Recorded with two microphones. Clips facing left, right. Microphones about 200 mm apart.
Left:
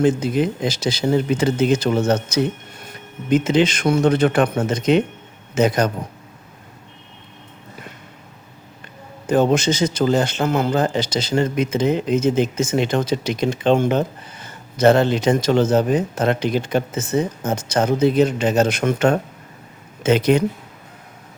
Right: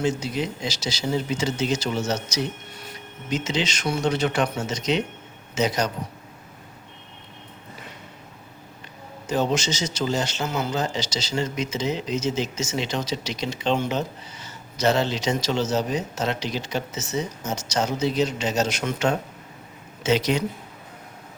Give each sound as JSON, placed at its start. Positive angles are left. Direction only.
{"t": 0.0, "sound": "a man's voice", "side_deg": 55}
{"t": 9.2, "sound": "a man's voice", "side_deg": 55}